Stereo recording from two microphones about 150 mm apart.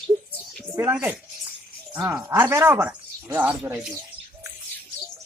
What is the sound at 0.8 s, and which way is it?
Speech, 10° right (ahead or behind).